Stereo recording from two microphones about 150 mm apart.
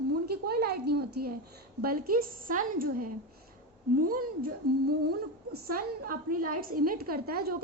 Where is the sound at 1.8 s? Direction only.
75° right (ahead or behind).